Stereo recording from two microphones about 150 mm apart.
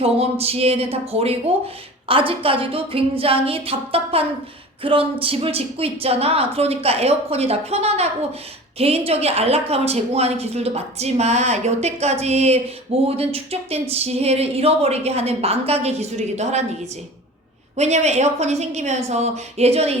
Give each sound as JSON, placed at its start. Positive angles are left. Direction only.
{"t": 0.0, "sound": "a woman's voice", "side_deg": -40}
{"t": 17.7, "sound": "a woman's voice", "side_deg": -50}